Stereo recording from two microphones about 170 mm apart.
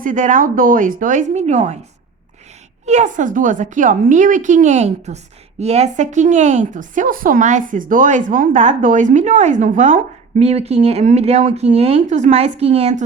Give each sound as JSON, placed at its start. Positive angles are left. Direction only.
{"t": 0.0, "sound": "a woman's voice", "side_deg": -50}
{"t": 2.8, "sound": "a woman's voice", "side_deg": -45}